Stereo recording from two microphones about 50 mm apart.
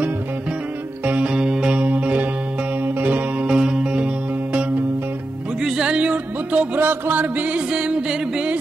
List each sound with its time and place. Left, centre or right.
1.0 s music: right
1.7 s music: right
2.8 s music: right
3.4 s music: centre
5.6 s music: centre
5.9 s music: right
6.8 s music: right; by 8.5 s centre